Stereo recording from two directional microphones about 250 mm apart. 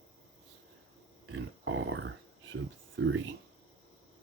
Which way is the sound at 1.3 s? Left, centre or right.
Right.